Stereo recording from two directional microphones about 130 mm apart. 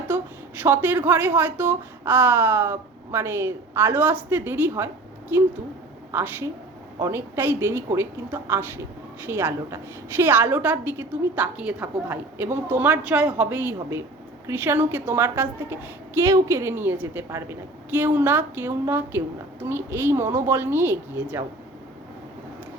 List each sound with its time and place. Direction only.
0.1 s a sound: 15° right (ahead or behind)
0.6 s a woman's voice: 15° right (ahead or behind)
6.1 s a woman's voice: 15° right (ahead or behind)